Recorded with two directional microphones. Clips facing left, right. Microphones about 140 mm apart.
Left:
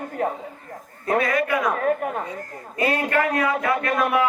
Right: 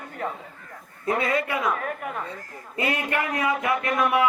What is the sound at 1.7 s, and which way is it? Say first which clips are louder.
Speech: left 6 dB; 40° left (ahead or behind).